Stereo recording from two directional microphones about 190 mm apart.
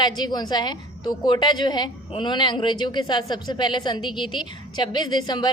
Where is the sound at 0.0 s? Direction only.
20° left (ahead or behind).